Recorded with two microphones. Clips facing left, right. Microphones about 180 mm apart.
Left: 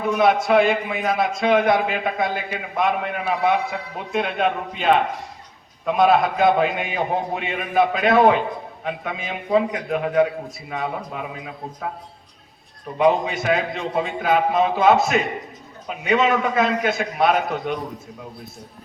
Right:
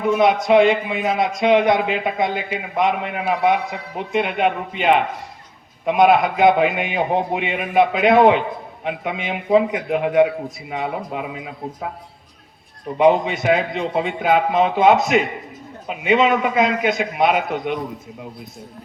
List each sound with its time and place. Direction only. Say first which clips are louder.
0.1 s a man's voice: right 2 dB; 20° right (ahead or behind)
6.0 s a man's voice: right 3 dB; 20° right (ahead or behind)
13.0 s a man's voice: right 3 dB; 25° right (ahead or behind)